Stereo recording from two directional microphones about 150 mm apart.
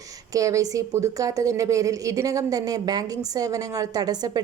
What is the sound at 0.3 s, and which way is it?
A woman's voice, 25° right (ahead or behind).